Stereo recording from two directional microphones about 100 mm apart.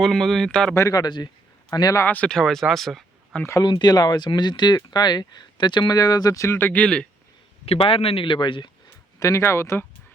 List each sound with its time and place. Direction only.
0.0 s speech: 5° left (ahead or behind)
0.7 s speech: 30° left (ahead or behind)
2.0 s speech: 15° left (ahead or behind)
3.7 s speech: 45° left (ahead or behind)
6.5 s speech: 20° left (ahead or behind)
7.6 s speech: 75° left (ahead or behind); by 8.7 s 55° left (ahead or behind)
9.1 s speech: 30° left (ahead or behind)